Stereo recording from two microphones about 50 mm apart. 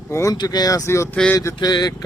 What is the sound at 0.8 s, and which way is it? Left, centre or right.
Speech, left.